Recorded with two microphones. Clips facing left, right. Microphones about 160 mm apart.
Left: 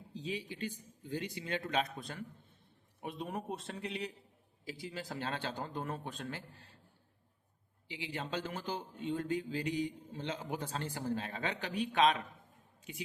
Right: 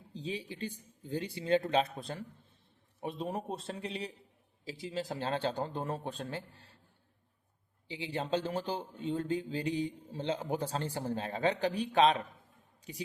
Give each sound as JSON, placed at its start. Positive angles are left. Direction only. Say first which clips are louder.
{"t": 0.1, "sound": "a man's voice", "louder": "right 1 dB", "side_deg": -30}
{"t": 7.9, "sound": "a man's voice", "louder": "right 6 dB", "side_deg": -30}